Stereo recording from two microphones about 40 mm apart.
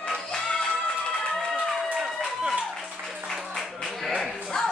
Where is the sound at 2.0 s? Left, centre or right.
Centre.